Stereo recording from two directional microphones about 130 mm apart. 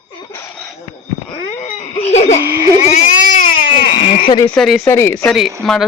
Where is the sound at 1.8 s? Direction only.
55° left (ahead or behind).